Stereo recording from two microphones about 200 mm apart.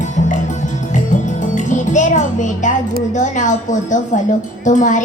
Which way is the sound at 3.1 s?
40° left (ahead or behind).